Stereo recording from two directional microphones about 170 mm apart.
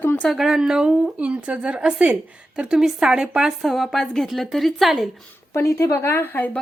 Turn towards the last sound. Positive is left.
turn(degrees=10)  # may be behind; listen again after turning